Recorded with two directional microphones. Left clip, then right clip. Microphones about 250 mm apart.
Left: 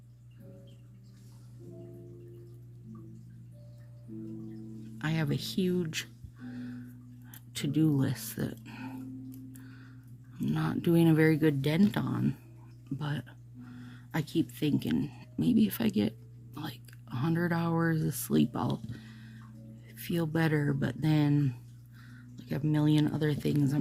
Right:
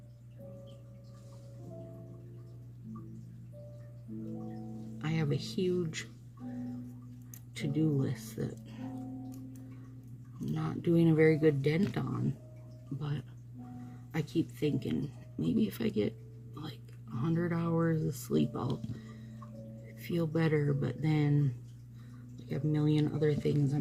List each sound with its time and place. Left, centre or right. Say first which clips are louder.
4.9 s speech: left 2 dB; left
7.5 s speech: left 4 dB; left
10.4 s speech: left 4 dB; left
16.6 s a sound: left 5 dB; left
20.0 s speech: left 2 dB; left